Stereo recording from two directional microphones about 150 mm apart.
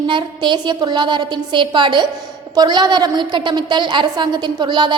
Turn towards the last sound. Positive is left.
turn(degrees=-30)  # may be behind; listen again after turning